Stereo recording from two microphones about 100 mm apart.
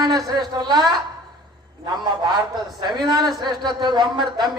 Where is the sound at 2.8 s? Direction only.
45° right (ahead or behind).